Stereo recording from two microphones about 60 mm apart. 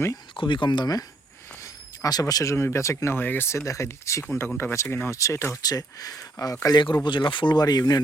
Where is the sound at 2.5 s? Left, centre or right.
Left.